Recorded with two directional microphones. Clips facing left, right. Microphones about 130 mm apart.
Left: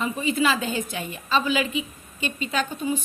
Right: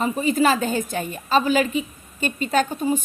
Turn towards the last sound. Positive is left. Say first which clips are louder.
# right 5 dB
turn(degrees=-45)  # may be behind; listen again after turning